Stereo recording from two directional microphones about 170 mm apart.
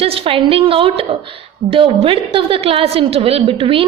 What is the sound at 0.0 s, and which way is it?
A woman's voice, 35° right (ahead or behind).